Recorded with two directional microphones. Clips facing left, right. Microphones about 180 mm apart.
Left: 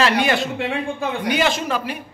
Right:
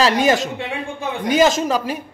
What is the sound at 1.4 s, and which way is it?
Speech, 40° right (ahead or behind).